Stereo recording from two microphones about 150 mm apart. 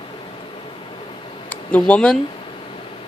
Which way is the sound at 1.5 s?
10° left (ahead or behind).